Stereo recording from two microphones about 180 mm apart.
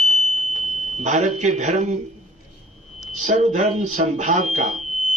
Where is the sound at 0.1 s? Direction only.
40° right (ahead or behind).